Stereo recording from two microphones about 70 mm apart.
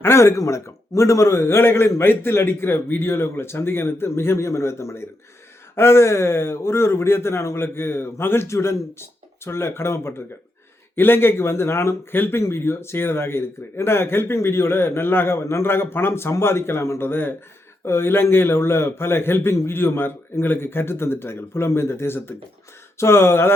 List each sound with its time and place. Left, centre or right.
0.0 s speech: left